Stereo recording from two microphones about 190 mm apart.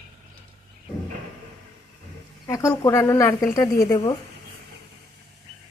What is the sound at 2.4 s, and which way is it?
Speech, 15° left (ahead or behind).